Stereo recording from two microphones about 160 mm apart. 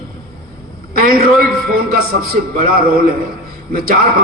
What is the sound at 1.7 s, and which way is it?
Speech, 65° right (ahead or behind).